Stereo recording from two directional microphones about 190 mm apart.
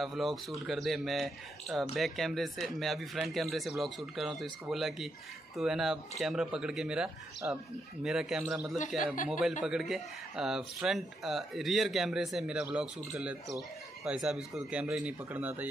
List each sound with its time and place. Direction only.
0.0 s speech: centre (ahead or behind)
8.7 s a man's voice: 45° left (ahead or behind)
9.6 s speech: centre (ahead or behind)